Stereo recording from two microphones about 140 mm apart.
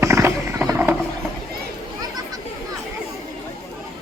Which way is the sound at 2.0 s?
25° right (ahead or behind).